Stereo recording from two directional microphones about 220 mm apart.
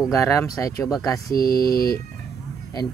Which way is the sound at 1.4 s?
45° left (ahead or behind).